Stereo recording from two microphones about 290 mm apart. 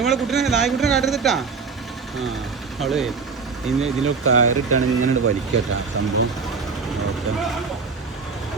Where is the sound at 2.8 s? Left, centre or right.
Centre.